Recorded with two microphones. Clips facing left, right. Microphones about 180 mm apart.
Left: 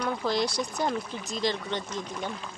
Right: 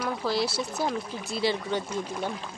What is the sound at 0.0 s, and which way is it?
Speech, 5° right (ahead or behind).